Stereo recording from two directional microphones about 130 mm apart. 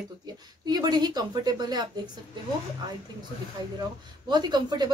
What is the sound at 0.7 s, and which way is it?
Speech, 30° right (ahead or behind).